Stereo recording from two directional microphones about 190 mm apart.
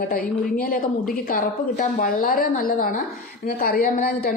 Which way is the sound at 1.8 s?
45° left (ahead or behind).